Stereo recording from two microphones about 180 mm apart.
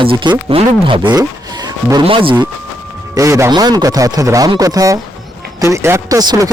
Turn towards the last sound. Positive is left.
turn(degrees=-20)  # may be behind; listen again after turning